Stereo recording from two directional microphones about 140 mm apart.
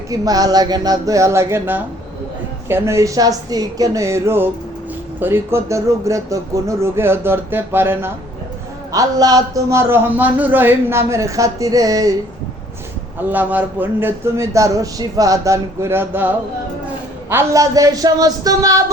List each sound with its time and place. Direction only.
0.1 s a man's voice: 25° right (ahead or behind)
8.9 s a man's voice: 25° right (ahead or behind)
13.1 s a man's voice: 15° right (ahead or behind)